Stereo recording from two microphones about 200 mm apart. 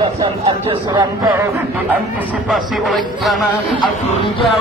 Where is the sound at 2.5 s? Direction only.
Centre (ahead or behind).